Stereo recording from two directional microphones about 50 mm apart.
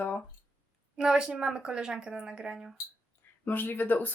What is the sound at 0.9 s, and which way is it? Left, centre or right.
A woman's voice, centre.